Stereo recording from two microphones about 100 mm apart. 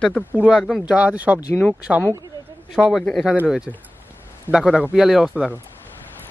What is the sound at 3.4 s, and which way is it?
Speech, 5° right (ahead or behind).